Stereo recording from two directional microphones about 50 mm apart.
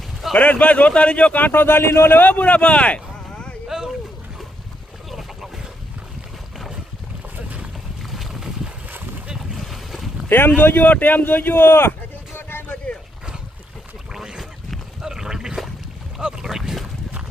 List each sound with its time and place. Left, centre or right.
0.3 s speech: left
1.6 s speech: left
3.7 s boat: centre
7.3 s boat: right
8.0 s boat: centre
10.2 s speech: left
12.9 s a sound: left
14.1 s a sound: centre
16.2 s boat: centre